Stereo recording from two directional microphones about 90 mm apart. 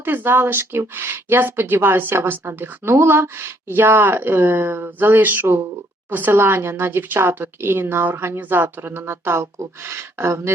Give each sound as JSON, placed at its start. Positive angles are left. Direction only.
{"t": 0.0, "sound": "speech", "side_deg": -25}